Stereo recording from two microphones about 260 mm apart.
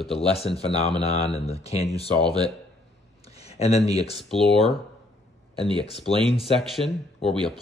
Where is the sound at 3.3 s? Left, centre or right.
Left.